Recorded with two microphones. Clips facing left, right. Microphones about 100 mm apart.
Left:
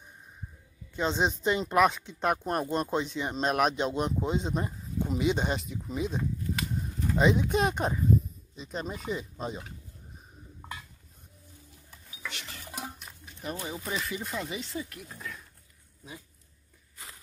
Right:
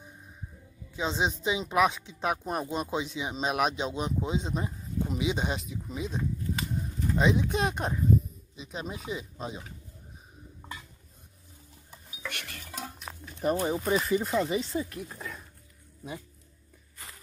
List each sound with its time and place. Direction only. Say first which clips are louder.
0.9 s speech: left 2 dB; centre (ahead or behind)
12.3 s dishes: right 2 dB; 55° right (ahead or behind)
12.6 s music: left 2 dB; 15° left (ahead or behind)
13.4 s speech: right 9 dB; 40° right (ahead or behind)